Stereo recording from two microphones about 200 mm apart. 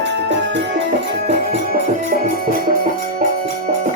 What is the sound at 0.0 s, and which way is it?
Music, 60° right (ahead or behind).